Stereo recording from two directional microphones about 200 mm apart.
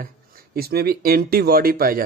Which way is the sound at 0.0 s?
50° right (ahead or behind).